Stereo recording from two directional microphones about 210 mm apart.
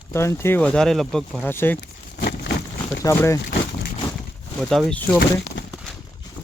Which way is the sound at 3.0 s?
15° left (ahead or behind).